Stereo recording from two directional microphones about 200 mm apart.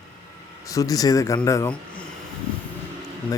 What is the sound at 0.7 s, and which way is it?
Speech, 15° left (ahead or behind).